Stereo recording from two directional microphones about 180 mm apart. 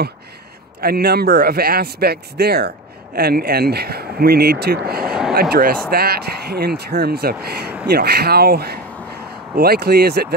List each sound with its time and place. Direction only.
0.7 s a man's voice: 60° right (ahead or behind)
5.0 s a sound: 5° right (ahead or behind)
5.3 s a man's voice: 55° right (ahead or behind)